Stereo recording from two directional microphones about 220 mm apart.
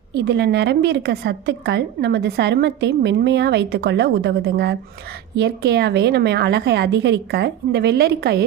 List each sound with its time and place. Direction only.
0.1 s a woman's voice: 50° right (ahead or behind)